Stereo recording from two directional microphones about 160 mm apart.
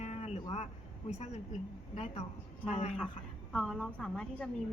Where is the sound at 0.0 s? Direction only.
40° left (ahead or behind).